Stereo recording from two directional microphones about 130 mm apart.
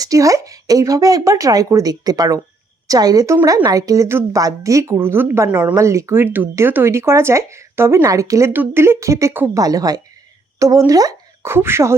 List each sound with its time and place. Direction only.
0.0 s speech: 25° right (ahead or behind)
5.7 s speech: 25° right (ahead or behind)